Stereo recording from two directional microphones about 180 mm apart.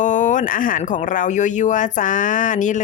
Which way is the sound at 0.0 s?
45° left (ahead or behind).